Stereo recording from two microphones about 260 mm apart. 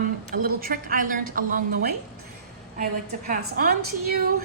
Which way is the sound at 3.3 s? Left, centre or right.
Right.